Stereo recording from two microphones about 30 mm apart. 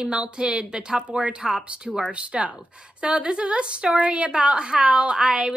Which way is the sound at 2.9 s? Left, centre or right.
Right.